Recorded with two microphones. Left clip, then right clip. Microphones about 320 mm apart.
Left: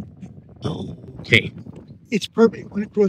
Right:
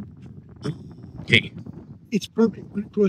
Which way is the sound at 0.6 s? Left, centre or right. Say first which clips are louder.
Left 5 dB; centre.